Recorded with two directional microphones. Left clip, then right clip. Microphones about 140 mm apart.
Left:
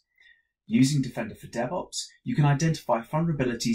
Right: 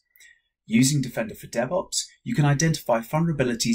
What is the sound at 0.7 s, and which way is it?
Speech, 20° right (ahead or behind).